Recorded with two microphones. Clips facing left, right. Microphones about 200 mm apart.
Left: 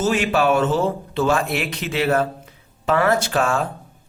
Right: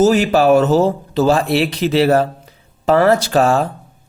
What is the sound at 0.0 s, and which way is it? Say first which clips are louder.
Speech: right 7 dB; 40° right (ahead or behind).